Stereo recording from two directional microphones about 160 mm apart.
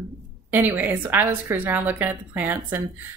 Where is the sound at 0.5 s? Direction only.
10° right (ahead or behind).